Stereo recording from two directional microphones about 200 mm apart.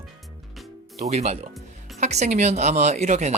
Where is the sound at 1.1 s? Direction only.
30° right (ahead or behind).